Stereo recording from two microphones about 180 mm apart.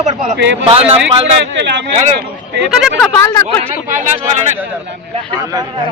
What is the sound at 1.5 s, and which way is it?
Speech, 80° right.